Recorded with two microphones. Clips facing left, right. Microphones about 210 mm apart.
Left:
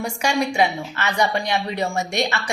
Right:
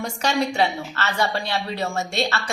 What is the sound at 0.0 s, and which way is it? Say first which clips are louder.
A woman's voice: left 1 dB; 10° left (ahead or behind).